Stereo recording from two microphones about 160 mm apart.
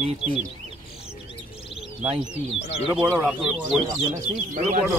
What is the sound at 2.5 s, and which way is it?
Speech, 40° left (ahead or behind).